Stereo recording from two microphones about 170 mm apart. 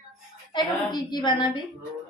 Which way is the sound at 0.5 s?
25° left (ahead or behind).